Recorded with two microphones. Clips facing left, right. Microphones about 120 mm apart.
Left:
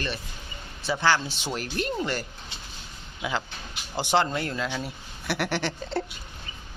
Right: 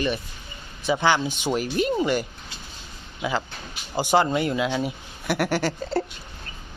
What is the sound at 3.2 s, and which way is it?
Speech, 5° right (ahead or behind).